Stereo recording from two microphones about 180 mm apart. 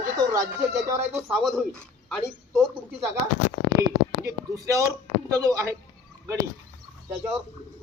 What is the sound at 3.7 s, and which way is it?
Speech, 60° left (ahead or behind).